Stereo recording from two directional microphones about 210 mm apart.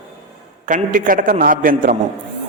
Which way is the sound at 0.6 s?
40° right (ahead or behind).